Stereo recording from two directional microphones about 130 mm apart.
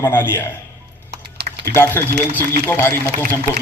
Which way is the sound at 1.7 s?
15° left (ahead or behind).